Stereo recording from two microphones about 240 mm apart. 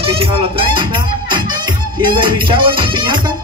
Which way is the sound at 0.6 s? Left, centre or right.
Right.